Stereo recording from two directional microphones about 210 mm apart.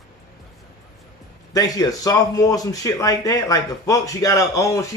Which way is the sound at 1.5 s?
15° left (ahead or behind).